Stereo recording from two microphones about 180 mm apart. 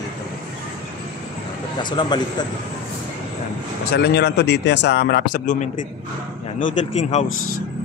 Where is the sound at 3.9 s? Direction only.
70° left (ahead or behind); by 7.2 s 45° left (ahead or behind).